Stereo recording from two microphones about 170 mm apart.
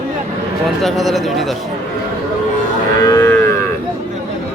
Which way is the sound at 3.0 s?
20° left (ahead or behind).